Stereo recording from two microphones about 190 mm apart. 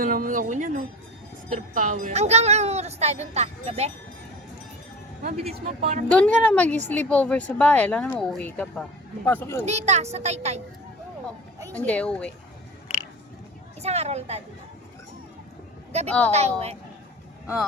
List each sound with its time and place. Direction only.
0.0 s speech: 45° right (ahead or behind)
5.5 s speech: 35° right (ahead or behind)
6.1 s speech: 5° left (ahead or behind)
9.6 s speech: 35° right (ahead or behind)
11.7 s speech: 5° left (ahead or behind)
13.8 s speech: 35° right (ahead or behind)
16.0 s speech: 5° left (ahead or behind)
16.3 s speech: 35° right (ahead or behind)